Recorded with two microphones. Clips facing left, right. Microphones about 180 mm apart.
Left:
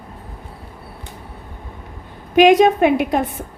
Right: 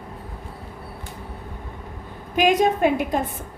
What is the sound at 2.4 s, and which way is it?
Speech, 80° left.